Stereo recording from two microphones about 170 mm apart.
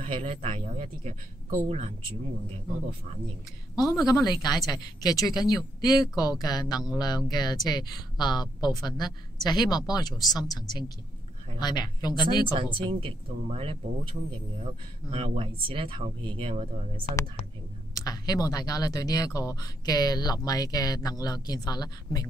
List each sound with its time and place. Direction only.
0.0 s speech: 35° right (ahead or behind)
3.7 s speech: 20° left (ahead or behind)
12.7 s speech: 30° right (ahead or behind)
17.9 s speech: 20° left (ahead or behind)